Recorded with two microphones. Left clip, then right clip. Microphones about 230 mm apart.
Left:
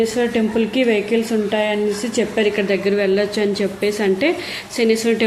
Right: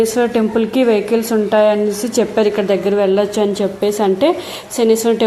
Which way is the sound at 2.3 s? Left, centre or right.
Right.